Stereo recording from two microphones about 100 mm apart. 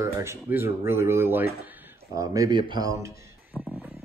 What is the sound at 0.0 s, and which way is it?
Speech, 25° right (ahead or behind).